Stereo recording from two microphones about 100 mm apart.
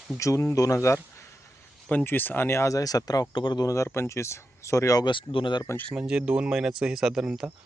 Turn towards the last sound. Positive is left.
turn(degrees=-5)  # may be behind; listen again after turning